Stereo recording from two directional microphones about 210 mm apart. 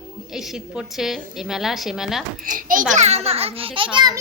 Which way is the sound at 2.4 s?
40° right (ahead or behind).